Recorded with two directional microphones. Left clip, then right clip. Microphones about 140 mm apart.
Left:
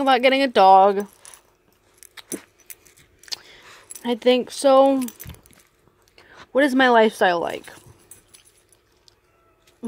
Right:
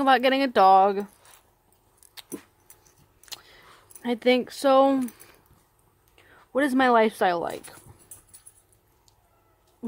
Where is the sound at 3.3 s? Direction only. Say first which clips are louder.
Left 9 dB; centre (ahead or behind).